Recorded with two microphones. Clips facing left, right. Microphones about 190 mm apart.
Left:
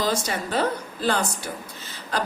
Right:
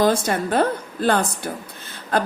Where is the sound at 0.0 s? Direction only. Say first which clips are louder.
Right 7 dB; 55° right (ahead or behind).